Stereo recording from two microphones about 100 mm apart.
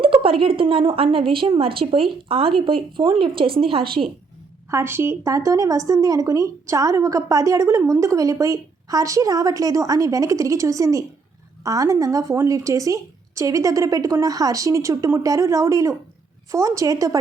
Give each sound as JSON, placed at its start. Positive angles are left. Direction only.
{"t": 0.0, "sound": "a woman's voice", "side_deg": -65}
{"t": 4.7, "sound": "a woman's voice", "side_deg": -25}